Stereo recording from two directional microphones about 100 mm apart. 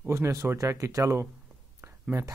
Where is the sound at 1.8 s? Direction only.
30° right (ahead or behind).